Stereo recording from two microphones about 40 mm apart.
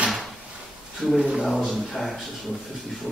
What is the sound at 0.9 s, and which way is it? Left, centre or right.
Speech, centre.